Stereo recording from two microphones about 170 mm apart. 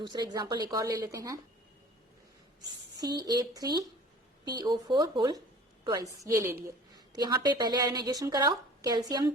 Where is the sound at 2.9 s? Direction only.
20° right (ahead or behind).